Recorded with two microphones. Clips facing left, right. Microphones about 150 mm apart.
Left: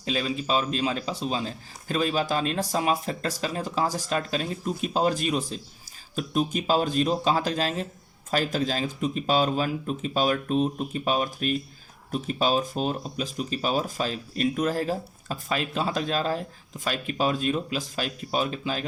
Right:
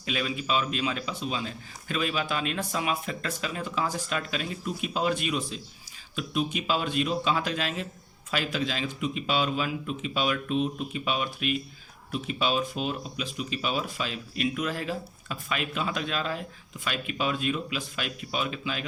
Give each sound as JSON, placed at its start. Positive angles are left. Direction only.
{"t": 0.0, "sound": "speech", "side_deg": 35}